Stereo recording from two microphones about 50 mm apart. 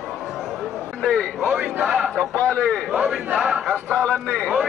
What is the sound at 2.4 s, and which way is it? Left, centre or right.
Speech, left.